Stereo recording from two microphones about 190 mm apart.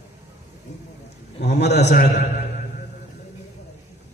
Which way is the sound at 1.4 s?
60° left (ahead or behind).